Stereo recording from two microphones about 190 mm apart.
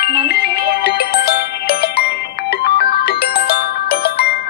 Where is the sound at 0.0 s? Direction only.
55° left (ahead or behind).